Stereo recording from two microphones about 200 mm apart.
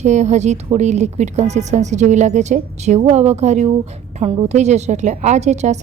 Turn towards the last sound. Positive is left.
turn(degrees=-35)  # may be behind; listen again after turning